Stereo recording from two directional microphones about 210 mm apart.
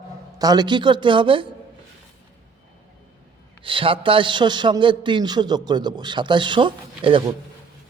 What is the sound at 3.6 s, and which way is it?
A man's voice, 25° right (ahead or behind).